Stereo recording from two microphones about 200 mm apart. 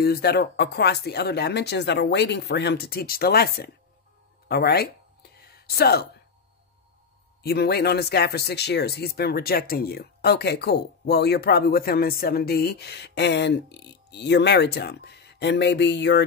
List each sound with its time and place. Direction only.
0.0 s speech: 50° left (ahead or behind)
5.4 s a sound: 50° left (ahead or behind)
7.4 s speech: 55° left (ahead or behind)